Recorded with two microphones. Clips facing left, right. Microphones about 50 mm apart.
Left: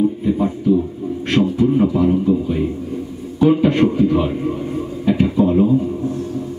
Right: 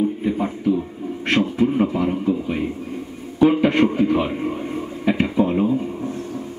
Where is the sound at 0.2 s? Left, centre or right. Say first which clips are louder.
Left 3 dB; right.